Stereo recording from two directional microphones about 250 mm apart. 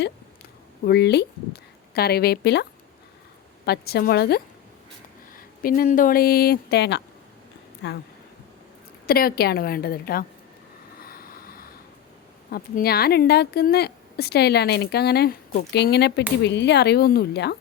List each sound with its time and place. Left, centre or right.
0.9 s speech: left
3.7 s speech: left
5.6 s speech: left
9.0 s speech: left
11.0 s waves: left
12.5 s speech: left